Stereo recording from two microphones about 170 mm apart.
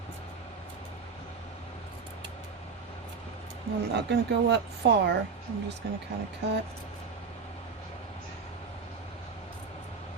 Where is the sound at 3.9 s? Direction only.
85° right.